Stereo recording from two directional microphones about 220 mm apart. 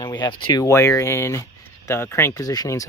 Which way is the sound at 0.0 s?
20° left (ahead or behind).